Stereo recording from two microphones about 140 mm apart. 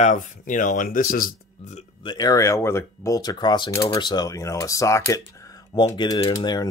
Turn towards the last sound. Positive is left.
turn(degrees=30)  # may be behind; listen again after turning